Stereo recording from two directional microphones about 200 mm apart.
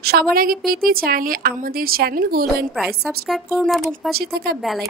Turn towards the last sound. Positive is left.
turn(degrees=-50)  # may be behind; listen again after turning